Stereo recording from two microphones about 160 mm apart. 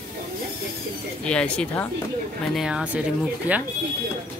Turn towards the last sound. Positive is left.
turn(degrees=-10)  # may be behind; listen again after turning